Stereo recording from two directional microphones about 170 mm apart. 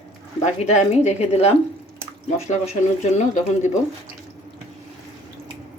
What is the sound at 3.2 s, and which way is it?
Speech, 45° left (ahead or behind).